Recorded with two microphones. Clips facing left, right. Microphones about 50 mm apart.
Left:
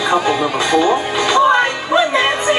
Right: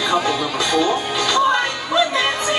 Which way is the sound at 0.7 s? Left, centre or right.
Left.